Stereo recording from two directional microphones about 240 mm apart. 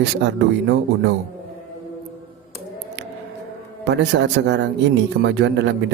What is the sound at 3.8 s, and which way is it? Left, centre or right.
Speech, right.